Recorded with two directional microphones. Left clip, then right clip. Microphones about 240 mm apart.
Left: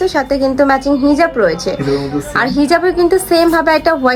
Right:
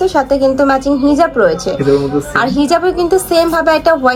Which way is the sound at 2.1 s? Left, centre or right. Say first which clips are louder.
Right 1 dB; centre.